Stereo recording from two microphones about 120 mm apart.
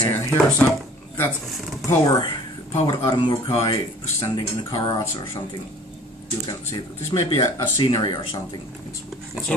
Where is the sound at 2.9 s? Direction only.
40° left (ahead or behind).